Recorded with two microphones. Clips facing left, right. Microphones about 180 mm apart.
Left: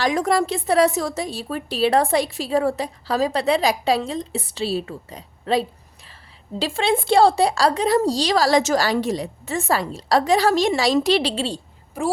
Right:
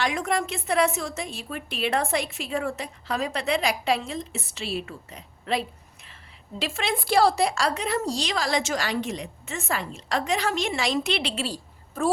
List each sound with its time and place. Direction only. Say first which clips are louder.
0.0 s a woman's voice: left 6 dB; 40° left (ahead or behind)